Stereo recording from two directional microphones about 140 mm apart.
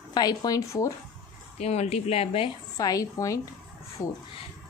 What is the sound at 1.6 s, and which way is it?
Speech, 50° left (ahead or behind).